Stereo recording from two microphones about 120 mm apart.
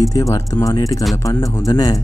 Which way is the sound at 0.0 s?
30° left (ahead or behind).